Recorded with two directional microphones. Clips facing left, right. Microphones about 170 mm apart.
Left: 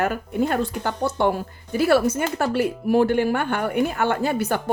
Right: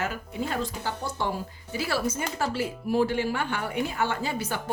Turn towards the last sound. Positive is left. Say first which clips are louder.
# left 8 dB
turn(degrees=60)  # may be behind; listen again after turning